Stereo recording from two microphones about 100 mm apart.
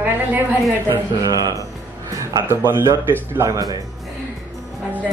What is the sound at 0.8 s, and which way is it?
Speech, 40° right (ahead or behind).